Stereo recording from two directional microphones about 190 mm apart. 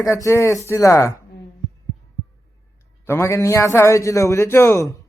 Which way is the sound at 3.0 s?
15° left (ahead or behind).